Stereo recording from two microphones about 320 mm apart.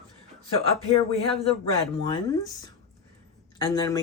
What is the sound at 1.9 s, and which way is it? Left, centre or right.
Speech, centre.